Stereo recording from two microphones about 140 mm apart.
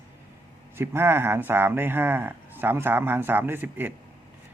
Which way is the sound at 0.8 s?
15° right (ahead or behind).